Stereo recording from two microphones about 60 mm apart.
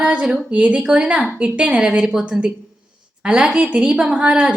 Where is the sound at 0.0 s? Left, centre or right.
Right.